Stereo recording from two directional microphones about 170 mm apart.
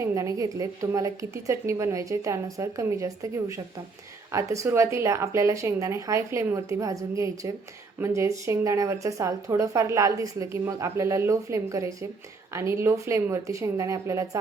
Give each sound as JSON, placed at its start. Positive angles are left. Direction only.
{"t": 0.0, "sound": "a woman's voice", "side_deg": -20}
{"t": 4.3, "sound": "speech", "side_deg": -20}